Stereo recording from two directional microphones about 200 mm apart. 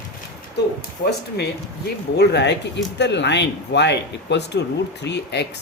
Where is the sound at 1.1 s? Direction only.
55° left (ahead or behind).